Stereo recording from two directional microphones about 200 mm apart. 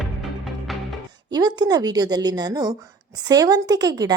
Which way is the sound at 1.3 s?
20° right (ahead or behind).